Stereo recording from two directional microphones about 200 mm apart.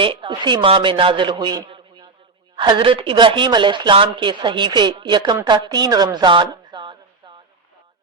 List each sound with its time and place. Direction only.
0.0 s a man's voice: 25° right (ahead or behind)